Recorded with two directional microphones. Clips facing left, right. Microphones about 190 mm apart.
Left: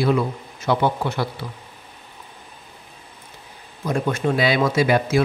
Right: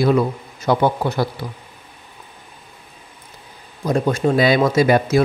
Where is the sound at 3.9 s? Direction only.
35° right (ahead or behind).